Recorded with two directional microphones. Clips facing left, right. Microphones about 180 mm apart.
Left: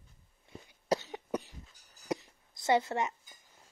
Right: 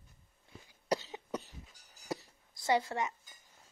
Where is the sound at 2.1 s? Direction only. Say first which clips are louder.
Left 4 dB; 20° left (ahead or behind).